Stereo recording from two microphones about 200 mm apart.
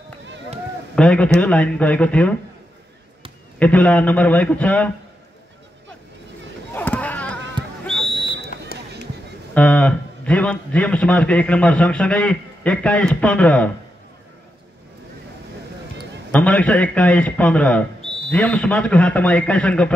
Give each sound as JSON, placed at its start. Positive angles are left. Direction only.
{"t": 0.9, "sound": "a man's voice", "side_deg": 5}
{"t": 3.5, "sound": "a man's voice", "side_deg": 5}
{"t": 6.7, "sound": "a sound", "side_deg": 10}
{"t": 8.7, "sound": "basketball bounce", "side_deg": 45}
{"t": 9.5, "sound": "a man's voice", "side_deg": 5}
{"t": 16.3, "sound": "a man's voice", "side_deg": 5}